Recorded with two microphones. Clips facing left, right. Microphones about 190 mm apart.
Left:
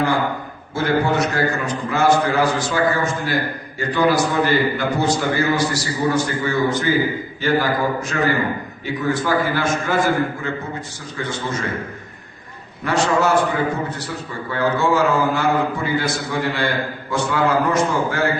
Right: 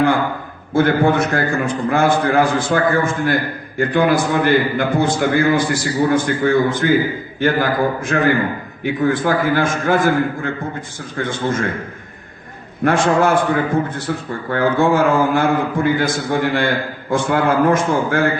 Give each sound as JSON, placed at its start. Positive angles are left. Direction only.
{"t": 0.7, "sound": "a man's voice", "side_deg": -55}
{"t": 12.8, "sound": "a man's voice", "side_deg": -50}